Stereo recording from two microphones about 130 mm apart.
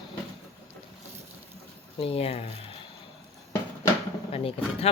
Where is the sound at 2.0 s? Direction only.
45° left (ahead or behind).